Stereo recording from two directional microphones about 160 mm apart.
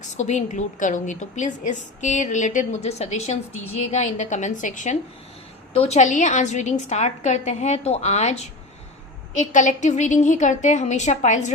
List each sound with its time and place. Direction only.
0.0 s a woman's voice: 50° left (ahead or behind)
5.7 s a woman's voice: 40° left (ahead or behind)